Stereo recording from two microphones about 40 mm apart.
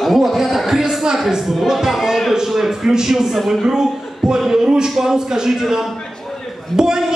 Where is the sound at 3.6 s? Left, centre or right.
Centre.